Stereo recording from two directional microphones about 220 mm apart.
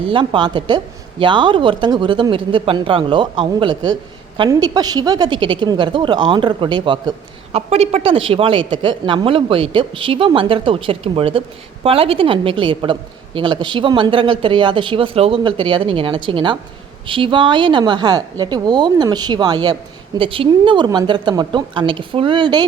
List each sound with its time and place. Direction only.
0.1 s speech: 20° right (ahead or behind)